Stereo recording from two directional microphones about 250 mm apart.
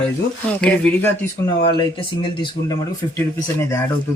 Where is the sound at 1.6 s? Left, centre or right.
Centre.